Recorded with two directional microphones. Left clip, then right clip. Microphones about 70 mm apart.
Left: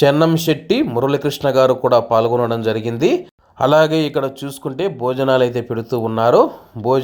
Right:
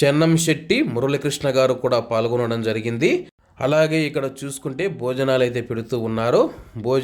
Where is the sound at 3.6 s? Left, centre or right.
Left.